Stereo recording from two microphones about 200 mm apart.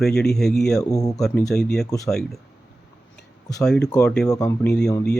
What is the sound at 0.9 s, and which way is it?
Speech, 20° left (ahead or behind).